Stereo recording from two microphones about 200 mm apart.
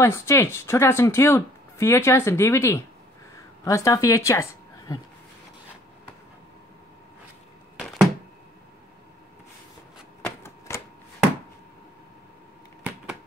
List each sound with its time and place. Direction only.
0.0 s a woman's voice: 15° left (ahead or behind)
10.2 s shuffling cards: 10° left (ahead or behind)